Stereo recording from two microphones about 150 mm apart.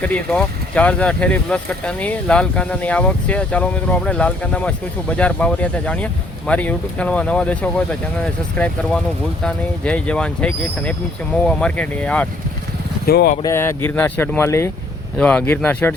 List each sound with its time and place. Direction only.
0.0 s speech: 5° left (ahead or behind)
13.1 s speech: 90° left
13.4 s speech: 15° left (ahead or behind)